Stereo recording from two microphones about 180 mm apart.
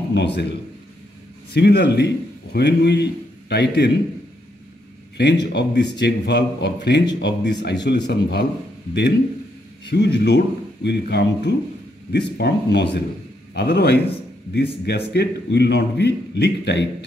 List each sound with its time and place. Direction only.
0.1 s a man's voice: 75° left (ahead or behind)
1.5 s a man's voice: 65° left (ahead or behind)
5.1 s a man's voice: 70° left (ahead or behind)
9.8 s a man's voice: 70° left (ahead or behind)